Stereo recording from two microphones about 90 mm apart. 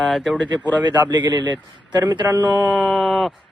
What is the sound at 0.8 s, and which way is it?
A man's voice, 55° right (ahead or behind).